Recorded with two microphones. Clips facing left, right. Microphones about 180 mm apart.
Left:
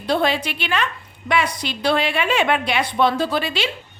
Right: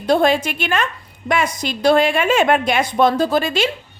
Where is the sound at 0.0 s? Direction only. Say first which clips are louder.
Right 5 dB; 45° right (ahead or behind).